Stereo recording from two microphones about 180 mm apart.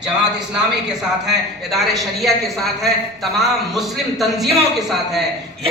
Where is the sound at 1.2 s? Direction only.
Centre (ahead or behind).